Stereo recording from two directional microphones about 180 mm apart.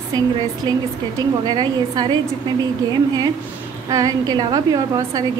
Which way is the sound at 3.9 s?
20° right (ahead or behind).